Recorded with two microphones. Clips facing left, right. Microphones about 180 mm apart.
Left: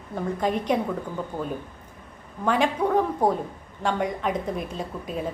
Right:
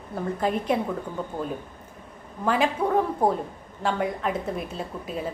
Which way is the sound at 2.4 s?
5° right (ahead or behind).